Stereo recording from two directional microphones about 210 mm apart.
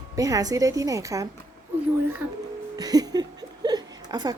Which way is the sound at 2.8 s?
20° right (ahead or behind).